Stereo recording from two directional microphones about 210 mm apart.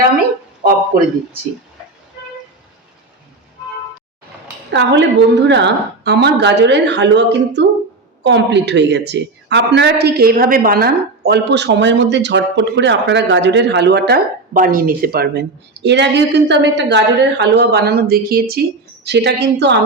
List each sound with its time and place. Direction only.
4.7 s a woman's voice: 55° right (ahead or behind)
14.5 s a woman's voice: 40° right (ahead or behind)